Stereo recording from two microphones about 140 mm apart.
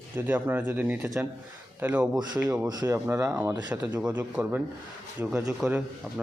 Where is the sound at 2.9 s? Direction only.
15° right (ahead or behind).